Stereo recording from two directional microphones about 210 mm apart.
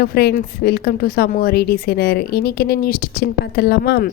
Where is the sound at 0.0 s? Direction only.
50° left (ahead or behind).